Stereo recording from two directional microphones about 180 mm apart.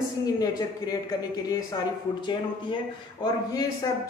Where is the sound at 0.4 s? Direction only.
20° left (ahead or behind).